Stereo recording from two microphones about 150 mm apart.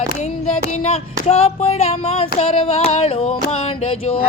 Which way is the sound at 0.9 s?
45° left (ahead or behind).